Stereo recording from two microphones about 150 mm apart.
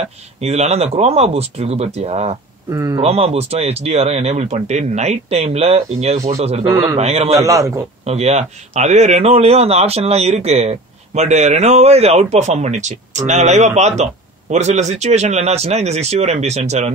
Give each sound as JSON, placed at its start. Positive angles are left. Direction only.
{"t": 0.4, "sound": "a man's voice", "side_deg": -45}
{"t": 2.7, "sound": "a man's voice", "side_deg": -25}
{"t": 3.0, "sound": "a man's voice", "side_deg": -45}
{"t": 6.7, "sound": "a man's voice", "side_deg": -15}
{"t": 7.0, "sound": "a man's voice", "side_deg": -45}
{"t": 7.3, "sound": "a man's voice", "side_deg": -20}
{"t": 8.0, "sound": "a man's voice", "side_deg": -45}